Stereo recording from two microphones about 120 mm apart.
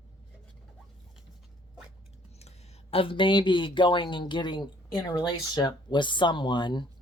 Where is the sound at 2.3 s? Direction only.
65° left (ahead or behind); by 6.9 s 40° left (ahead or behind).